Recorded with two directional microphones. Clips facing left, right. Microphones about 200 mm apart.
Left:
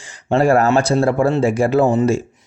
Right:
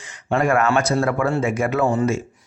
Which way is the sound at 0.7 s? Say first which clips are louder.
Left 4 dB; 25° left (ahead or behind).